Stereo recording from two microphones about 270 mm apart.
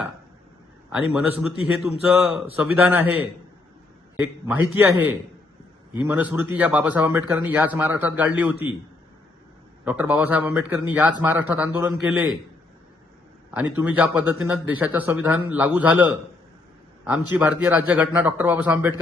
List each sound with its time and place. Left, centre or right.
0.9 s a man's voice: centre
9.8 s a man's voice: centre
13.5 s a man's voice: centre
17.3 s a man's voice: centre